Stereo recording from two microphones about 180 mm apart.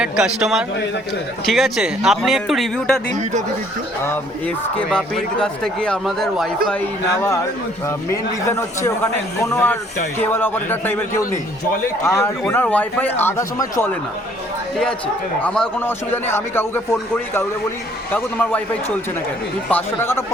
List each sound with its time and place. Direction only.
0.0 s a man's voice: 5° right (ahead or behind)
4.0 s a man's voice: 10° left (ahead or behind)
6.7 s a man's voice: 10° left (ahead or behind)